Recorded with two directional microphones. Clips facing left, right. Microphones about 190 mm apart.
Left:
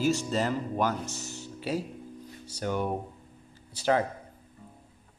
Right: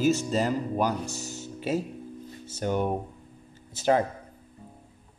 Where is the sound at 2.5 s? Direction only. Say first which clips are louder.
Right 3 dB; 20° right (ahead or behind).